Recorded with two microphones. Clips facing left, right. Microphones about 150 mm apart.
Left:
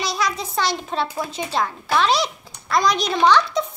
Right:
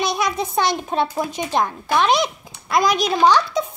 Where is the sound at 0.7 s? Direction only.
15° right (ahead or behind).